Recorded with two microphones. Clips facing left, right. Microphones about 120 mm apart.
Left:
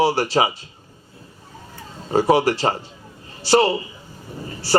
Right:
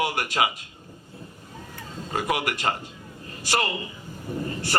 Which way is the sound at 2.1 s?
30° left (ahead or behind).